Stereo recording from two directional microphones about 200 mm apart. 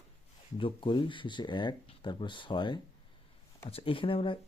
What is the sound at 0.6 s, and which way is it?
Speech, 25° left (ahead or behind).